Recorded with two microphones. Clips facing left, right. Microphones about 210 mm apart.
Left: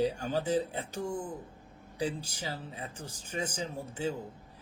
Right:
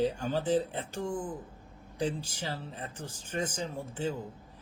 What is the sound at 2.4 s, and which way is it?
Speech, 10° left (ahead or behind).